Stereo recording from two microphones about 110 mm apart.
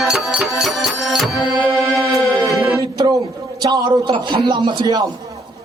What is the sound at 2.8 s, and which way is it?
Music, 40° right (ahead or behind).